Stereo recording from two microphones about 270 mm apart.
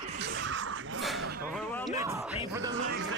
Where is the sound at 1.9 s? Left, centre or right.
Centre.